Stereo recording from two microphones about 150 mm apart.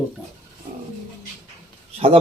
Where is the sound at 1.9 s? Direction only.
40° right (ahead or behind).